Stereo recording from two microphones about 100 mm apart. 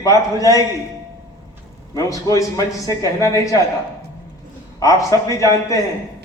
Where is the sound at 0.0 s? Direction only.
35° left (ahead or behind).